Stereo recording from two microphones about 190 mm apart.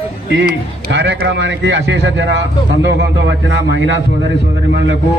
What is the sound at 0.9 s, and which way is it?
A man's voice, 70° right (ahead or behind).